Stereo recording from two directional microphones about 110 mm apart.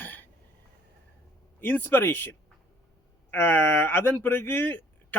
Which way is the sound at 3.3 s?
20° left (ahead or behind).